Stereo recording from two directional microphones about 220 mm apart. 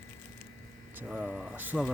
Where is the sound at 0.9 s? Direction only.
5° right (ahead or behind).